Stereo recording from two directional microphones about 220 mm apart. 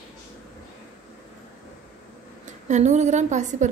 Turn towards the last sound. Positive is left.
turn(degrees=-35)  # may be behind; listen again after turning